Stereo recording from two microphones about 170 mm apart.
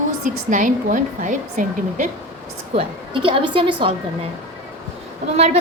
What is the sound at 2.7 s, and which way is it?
A woman's voice, 30° right (ahead or behind).